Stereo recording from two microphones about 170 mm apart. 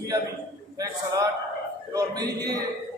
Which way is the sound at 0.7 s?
20° right (ahead or behind).